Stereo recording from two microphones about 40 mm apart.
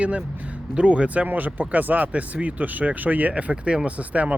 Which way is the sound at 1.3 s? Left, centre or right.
Right.